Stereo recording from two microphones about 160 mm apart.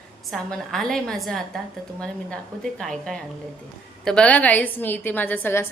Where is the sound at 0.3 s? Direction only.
5° left (ahead or behind).